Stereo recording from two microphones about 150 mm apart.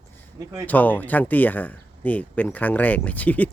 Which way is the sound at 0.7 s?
10° left (ahead or behind).